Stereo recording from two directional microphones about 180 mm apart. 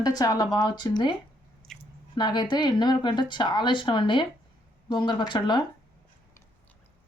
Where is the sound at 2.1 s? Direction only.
25° left (ahead or behind).